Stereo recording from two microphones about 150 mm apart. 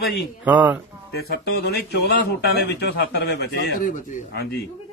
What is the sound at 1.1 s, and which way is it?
Speech, 90° left.